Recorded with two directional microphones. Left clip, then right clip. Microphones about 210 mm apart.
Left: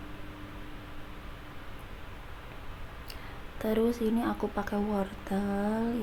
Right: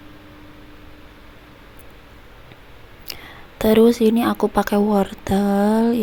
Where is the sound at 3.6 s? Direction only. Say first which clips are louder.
Right 15 dB; 40° right (ahead or behind).